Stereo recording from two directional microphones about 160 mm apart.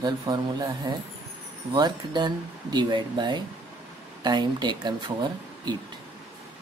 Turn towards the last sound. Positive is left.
turn(degrees=-25)  # may be behind; listen again after turning